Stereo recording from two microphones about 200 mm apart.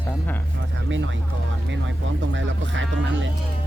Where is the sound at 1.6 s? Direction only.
65° right (ahead or behind).